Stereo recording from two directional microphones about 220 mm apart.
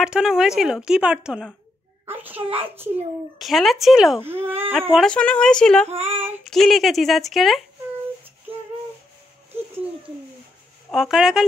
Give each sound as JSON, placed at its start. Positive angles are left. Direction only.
{"t": 0.0, "sound": "a child's voice", "side_deg": -5}
{"t": 2.4, "sound": "child singing", "side_deg": -25}
{"t": 2.7, "sound": "a child's voice", "side_deg": -10}
{"t": 5.9, "sound": "child singing", "side_deg": -30}
{"t": 6.4, "sound": "a child's voice", "side_deg": 0}
{"t": 10.9, "sound": "a child's voice", "side_deg": 0}